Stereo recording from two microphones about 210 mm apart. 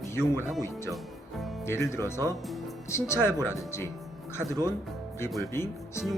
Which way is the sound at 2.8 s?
15° left (ahead or behind).